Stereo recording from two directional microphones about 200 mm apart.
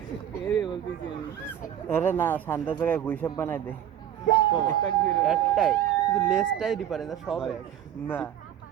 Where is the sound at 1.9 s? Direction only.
10° left (ahead or behind).